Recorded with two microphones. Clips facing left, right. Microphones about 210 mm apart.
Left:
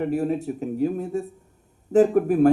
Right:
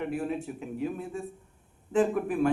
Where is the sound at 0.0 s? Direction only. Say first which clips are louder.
Left 7 dB; 40° left (ahead or behind).